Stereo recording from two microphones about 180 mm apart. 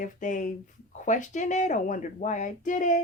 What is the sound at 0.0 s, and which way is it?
Speech, 45° left (ahead or behind).